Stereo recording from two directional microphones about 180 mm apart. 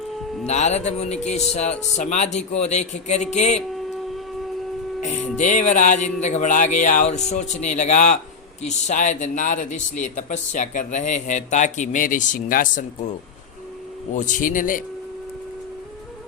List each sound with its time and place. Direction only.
0.4 s speech: 40° left (ahead or behind)
5.0 s speech: 45° left (ahead or behind)
14.2 s speech: 45° left (ahead or behind)